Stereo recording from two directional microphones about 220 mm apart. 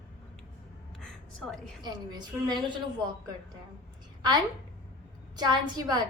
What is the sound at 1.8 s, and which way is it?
Speech, 20° right (ahead or behind).